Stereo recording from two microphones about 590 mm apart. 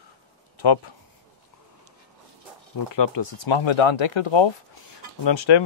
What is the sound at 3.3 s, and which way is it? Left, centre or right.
Speech, left.